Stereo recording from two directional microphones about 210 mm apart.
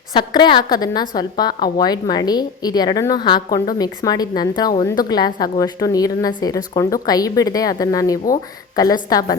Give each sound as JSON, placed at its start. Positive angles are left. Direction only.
{"t": 0.1, "sound": "a woman's voice", "side_deg": 20}